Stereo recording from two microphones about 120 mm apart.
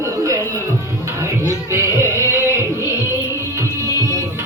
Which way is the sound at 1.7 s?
25° right (ahead or behind).